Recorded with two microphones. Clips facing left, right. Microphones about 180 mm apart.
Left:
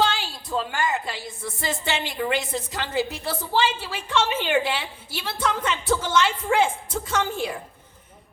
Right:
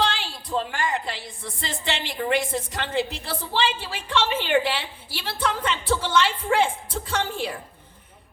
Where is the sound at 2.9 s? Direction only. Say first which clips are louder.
Left 1 dB; 30° right (ahead or behind).